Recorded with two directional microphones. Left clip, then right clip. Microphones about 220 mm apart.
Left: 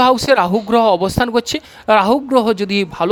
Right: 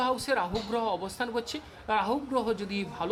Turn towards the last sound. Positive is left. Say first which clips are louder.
# left 16 dB
turn(degrees=45)  # may be behind; listen again after turning